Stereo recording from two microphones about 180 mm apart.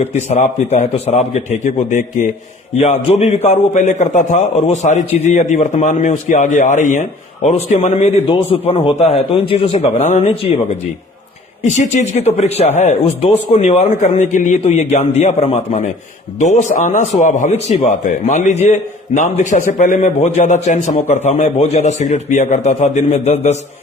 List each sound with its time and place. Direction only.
0.0 s a man's voice: 40° left (ahead or behind)
11.6 s a man's voice: 40° left (ahead or behind)